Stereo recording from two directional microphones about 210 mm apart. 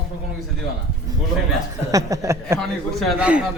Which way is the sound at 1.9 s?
15° right (ahead or behind).